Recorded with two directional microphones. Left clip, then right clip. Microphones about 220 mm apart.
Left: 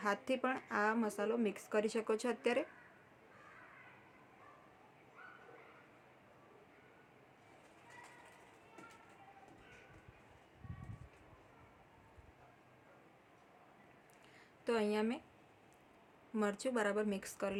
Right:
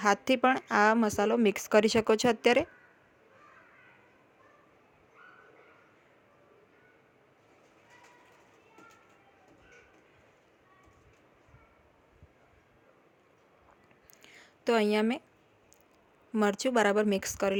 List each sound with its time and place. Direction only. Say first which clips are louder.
0.0 s speech: right 12 dB; 40° right (ahead or behind)
14.3 s a sound: right 10 dB; 40° right (ahead or behind)
16.3 s speech: right 10 dB; 40° right (ahead or behind)